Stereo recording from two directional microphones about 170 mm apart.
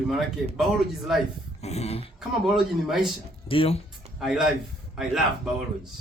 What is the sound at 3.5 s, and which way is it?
Speech, 30° left (ahead or behind).